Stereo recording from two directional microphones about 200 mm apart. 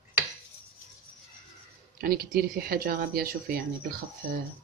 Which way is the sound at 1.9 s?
50° right (ahead or behind).